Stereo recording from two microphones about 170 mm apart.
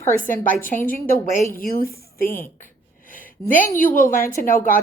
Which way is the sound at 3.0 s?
55° left (ahead or behind).